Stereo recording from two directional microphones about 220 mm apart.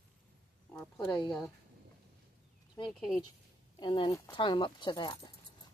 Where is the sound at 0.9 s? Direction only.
20° left (ahead or behind).